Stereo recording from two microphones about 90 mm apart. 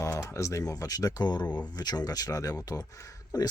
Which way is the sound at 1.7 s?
50° left (ahead or behind).